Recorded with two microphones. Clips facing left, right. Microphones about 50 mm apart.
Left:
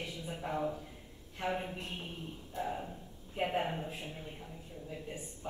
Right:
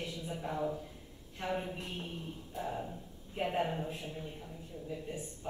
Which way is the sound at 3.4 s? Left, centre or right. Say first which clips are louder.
Even; centre.